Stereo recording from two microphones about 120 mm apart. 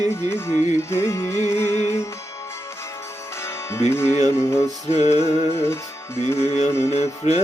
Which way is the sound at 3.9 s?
20° left (ahead or behind).